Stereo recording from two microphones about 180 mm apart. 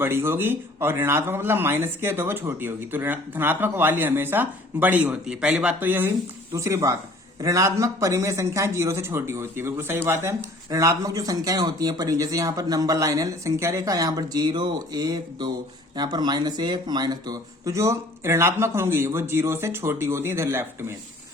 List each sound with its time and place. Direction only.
0.0 s a man's voice: 15° right (ahead or behind)